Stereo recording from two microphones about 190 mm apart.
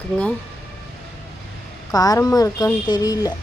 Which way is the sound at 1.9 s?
20° left (ahead or behind).